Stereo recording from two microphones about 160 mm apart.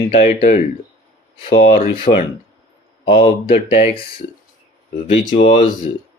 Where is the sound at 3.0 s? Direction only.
35° left (ahead or behind).